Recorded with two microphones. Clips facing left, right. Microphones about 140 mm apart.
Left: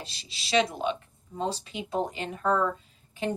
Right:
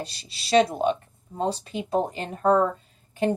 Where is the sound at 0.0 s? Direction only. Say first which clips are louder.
Right 7 dB; 45° right (ahead or behind).